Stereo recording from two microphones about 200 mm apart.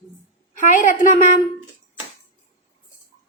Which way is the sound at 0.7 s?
40° left (ahead or behind).